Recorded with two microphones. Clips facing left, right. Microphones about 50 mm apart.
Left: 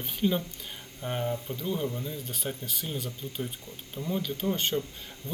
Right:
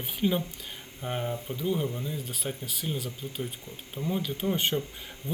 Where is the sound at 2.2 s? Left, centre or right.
Centre.